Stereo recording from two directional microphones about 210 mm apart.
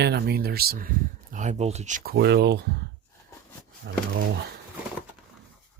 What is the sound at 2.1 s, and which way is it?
Speech, 50° right (ahead or behind).